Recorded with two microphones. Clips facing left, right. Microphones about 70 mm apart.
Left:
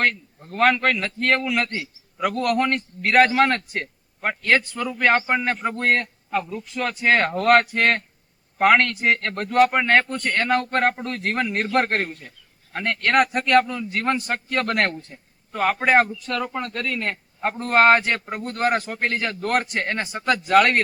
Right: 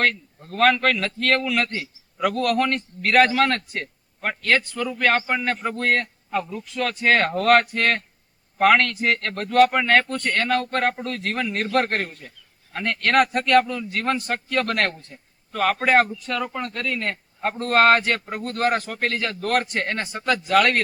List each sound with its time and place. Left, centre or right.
0.4 s a man's voice: centre
19.7 s speech: centre; by 20.8 s left